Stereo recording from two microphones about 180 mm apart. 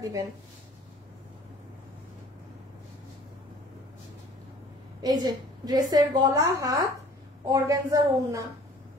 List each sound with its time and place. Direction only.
0.0 s a woman's voice: 20° right (ahead or behind)
5.0 s a woman's voice: 20° right (ahead or behind)